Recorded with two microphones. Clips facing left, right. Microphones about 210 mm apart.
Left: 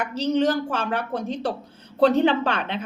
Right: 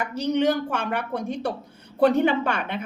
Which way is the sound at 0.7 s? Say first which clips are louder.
Left 1 dB; 15° right (ahead or behind).